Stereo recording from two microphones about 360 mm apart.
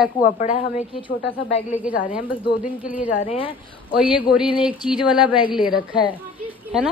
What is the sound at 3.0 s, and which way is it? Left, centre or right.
Speech, centre.